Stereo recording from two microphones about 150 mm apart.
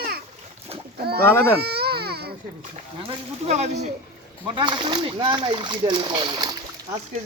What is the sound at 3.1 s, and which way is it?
Speech, 45° right (ahead or behind).